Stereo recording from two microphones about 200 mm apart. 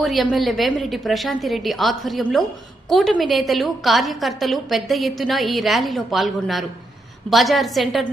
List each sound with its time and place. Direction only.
0.0 s a woman's voice: centre (ahead or behind)